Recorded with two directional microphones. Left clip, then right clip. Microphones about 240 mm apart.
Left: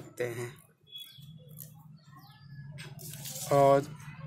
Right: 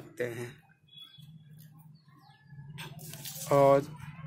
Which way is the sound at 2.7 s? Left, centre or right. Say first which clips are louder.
Right 2 dB; centre.